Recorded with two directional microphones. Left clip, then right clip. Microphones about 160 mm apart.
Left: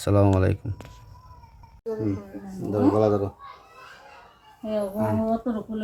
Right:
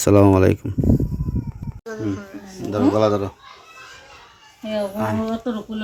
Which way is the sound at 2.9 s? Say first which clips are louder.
Right 5 dB; 20° right (ahead or behind).